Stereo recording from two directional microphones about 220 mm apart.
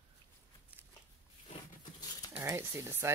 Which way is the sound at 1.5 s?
20° left (ahead or behind).